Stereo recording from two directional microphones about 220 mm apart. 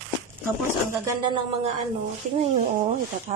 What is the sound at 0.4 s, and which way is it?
Speech, 15° right (ahead or behind).